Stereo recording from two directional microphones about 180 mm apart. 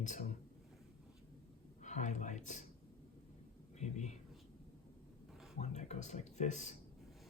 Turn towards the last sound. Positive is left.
turn(degrees=40)  # may be behind; listen again after turning